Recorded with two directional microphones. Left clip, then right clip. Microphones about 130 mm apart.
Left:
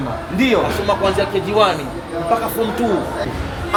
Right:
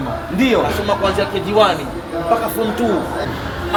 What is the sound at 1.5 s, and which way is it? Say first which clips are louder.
Speech: right 2 dB; 30° left (ahead or behind).